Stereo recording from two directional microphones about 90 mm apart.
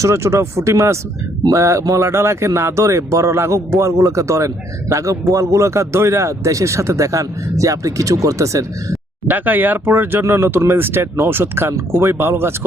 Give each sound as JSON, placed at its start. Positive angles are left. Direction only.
{"t": 0.0, "sound": "a man's voice", "side_deg": -30}
{"t": 9.2, "sound": "speech", "side_deg": -20}